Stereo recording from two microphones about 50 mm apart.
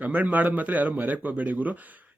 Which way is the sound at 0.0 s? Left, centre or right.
Right.